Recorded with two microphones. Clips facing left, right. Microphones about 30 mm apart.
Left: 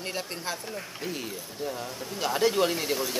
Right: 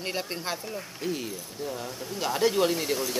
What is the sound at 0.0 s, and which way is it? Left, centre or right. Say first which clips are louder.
Speech: right 2 dB; centre.